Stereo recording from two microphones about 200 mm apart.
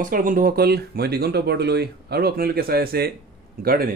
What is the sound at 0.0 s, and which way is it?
Speech, 40° right (ahead or behind).